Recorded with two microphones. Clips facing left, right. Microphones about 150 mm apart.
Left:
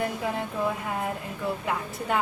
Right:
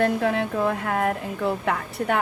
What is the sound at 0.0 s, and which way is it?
A woman's voice, 70° right (ahead or behind).